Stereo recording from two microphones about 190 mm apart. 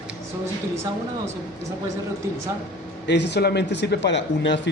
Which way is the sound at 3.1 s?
60° left (ahead or behind).